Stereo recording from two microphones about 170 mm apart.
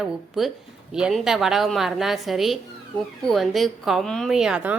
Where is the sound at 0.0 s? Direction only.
Centre (ahead or behind).